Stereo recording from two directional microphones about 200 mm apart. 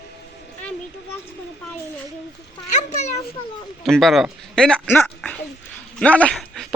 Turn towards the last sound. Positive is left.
turn(degrees=5)  # may be behind; listen again after turning